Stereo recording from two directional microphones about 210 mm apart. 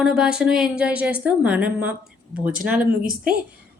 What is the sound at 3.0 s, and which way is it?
Speech, 45° right (ahead or behind).